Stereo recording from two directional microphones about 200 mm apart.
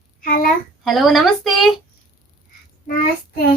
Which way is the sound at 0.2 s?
45° left (ahead or behind).